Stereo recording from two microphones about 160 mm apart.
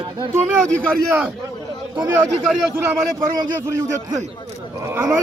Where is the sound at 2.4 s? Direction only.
Centre (ahead or behind).